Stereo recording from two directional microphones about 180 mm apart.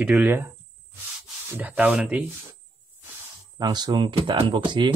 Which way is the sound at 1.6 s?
10° right (ahead or behind).